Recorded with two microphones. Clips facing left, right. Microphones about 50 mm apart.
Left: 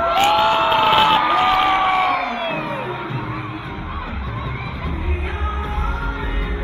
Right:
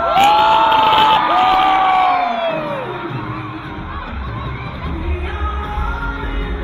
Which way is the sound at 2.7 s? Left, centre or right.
Centre.